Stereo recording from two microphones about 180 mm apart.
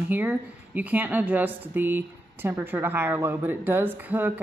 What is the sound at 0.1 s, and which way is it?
Speech, 10° right (ahead or behind).